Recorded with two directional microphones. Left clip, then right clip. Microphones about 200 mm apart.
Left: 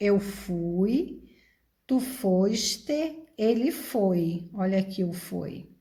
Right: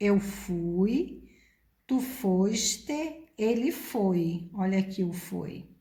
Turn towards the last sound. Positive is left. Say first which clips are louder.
# left 2 dB
turn(degrees=35)  # may be behind; listen again after turning